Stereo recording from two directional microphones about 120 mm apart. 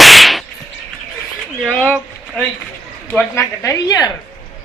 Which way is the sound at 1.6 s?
5° left (ahead or behind).